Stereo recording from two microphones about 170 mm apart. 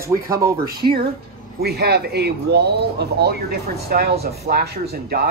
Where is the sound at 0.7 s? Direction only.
65° right (ahead or behind).